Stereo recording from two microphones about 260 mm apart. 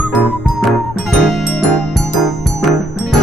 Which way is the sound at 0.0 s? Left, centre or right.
Centre.